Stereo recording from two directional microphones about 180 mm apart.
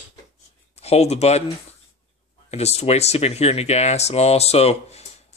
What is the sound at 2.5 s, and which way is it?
Speech, 35° left (ahead or behind).